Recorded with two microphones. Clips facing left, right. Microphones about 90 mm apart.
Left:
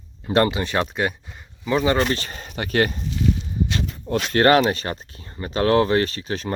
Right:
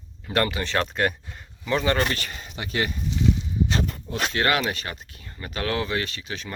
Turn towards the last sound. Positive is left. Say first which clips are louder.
# left 8 dB
turn(degrees=40)  # may be behind; listen again after turning